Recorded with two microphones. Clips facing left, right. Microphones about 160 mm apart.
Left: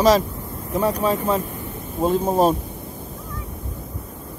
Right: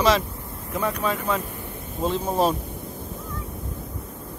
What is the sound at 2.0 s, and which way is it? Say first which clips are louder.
Speech: left 5 dB; 45° left (ahead or behind).